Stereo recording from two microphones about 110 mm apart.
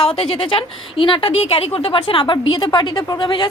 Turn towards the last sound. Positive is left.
turn(degrees=45)  # may be behind; listen again after turning